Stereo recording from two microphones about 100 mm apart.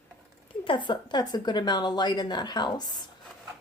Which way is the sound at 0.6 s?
55° left (ahead or behind).